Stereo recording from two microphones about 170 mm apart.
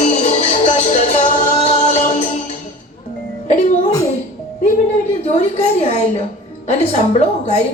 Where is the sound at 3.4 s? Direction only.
40° left (ahead or behind).